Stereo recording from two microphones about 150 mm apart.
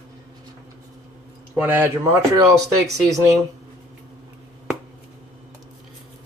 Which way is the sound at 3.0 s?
20° right (ahead or behind).